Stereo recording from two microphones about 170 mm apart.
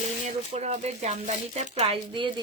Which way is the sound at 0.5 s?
40° right (ahead or behind).